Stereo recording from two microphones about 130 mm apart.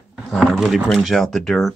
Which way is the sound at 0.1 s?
5° right (ahead or behind).